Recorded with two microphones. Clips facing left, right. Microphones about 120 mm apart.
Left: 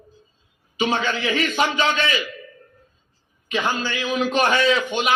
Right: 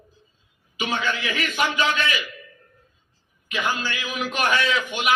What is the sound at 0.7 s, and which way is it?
A man's voice, 30° left (ahead or behind).